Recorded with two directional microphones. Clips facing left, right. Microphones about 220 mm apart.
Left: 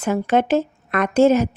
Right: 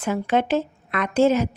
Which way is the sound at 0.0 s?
45° left (ahead or behind).